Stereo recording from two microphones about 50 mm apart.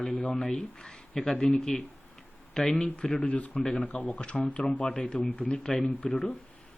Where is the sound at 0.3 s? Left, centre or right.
Centre.